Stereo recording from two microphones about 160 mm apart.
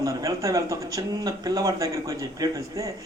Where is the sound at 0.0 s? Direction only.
20° right (ahead or behind).